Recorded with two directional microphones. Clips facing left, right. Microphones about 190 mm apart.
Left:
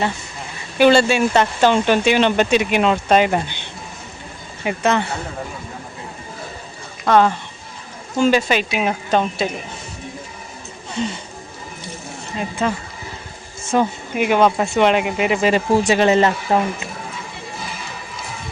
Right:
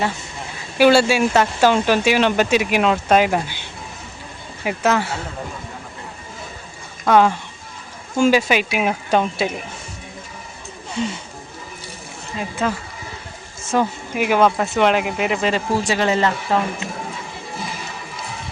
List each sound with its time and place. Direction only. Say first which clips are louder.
0.8 s speech: even; 5° right (ahead or behind)
7.0 s speech: even; 10° right (ahead or behind)
12.4 s speech: left 1 dB; centre (ahead or behind)
15.5 s speech: left 4 dB; 20° left (ahead or behind)